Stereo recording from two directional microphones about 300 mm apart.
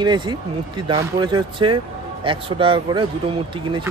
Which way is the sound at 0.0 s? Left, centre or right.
Centre.